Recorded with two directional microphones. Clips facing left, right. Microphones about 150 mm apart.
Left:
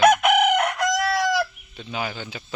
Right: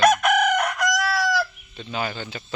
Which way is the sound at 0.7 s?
25° left (ahead or behind).